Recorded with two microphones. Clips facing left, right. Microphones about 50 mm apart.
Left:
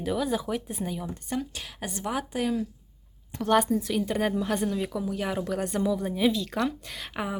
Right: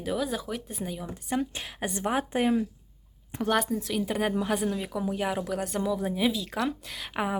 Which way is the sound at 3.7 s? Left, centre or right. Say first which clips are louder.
Left 2 dB; centre.